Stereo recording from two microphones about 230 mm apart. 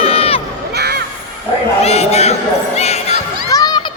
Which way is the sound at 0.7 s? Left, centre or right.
Right.